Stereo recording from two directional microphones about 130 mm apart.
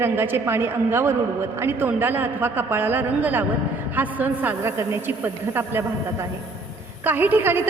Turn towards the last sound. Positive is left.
turn(degrees=-15)  # may be behind; listen again after turning